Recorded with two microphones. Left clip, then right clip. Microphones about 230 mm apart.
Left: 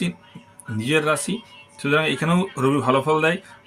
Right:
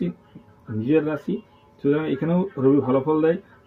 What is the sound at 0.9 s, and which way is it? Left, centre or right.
Speech, left.